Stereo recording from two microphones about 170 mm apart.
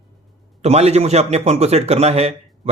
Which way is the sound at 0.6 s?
40° right (ahead or behind).